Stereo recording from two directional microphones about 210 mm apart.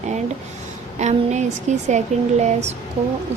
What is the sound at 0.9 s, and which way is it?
A woman's voice, 35° right (ahead or behind).